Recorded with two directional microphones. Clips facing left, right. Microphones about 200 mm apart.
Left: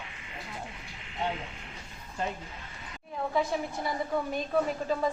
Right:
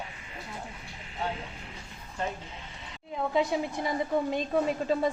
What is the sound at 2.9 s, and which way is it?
A woman's voice, 20° right (ahead or behind).